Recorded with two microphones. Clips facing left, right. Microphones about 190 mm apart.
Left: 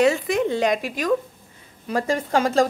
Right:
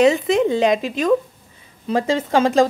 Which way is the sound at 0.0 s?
20° right (ahead or behind).